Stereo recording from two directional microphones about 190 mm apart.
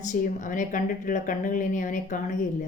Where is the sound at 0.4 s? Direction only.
45° left (ahead or behind).